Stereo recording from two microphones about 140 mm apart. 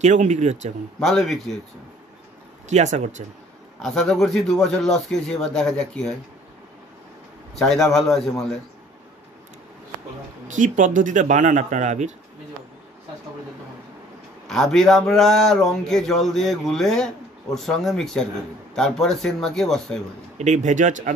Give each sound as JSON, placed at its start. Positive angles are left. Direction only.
{"t": 0.0, "sound": "speech", "side_deg": -60}
{"t": 1.0, "sound": "speech", "side_deg": 0}
{"t": 2.7, "sound": "speech", "side_deg": -60}
{"t": 3.8, "sound": "speech", "side_deg": 0}
{"t": 7.5, "sound": "speech", "side_deg": 0}
{"t": 10.5, "sound": "speech", "side_deg": -65}
{"t": 14.5, "sound": "speech", "side_deg": 5}
{"t": 20.3, "sound": "speech", "side_deg": -60}